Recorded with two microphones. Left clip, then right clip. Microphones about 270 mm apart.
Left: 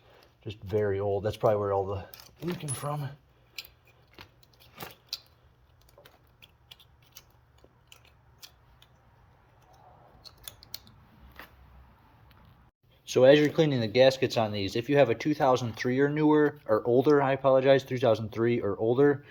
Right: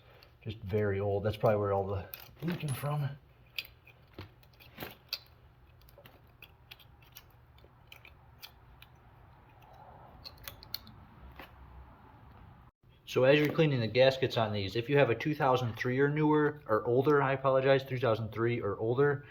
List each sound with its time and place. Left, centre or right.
0.1 s speech: left
11.4 s a sound: centre
13.1 s speech: left